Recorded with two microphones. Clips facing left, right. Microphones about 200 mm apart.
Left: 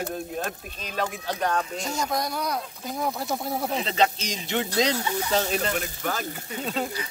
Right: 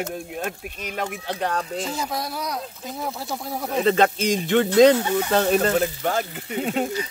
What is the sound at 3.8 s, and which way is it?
Speech, 50° right (ahead or behind).